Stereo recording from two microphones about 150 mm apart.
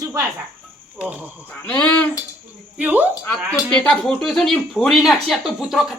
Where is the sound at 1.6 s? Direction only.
5° left (ahead or behind).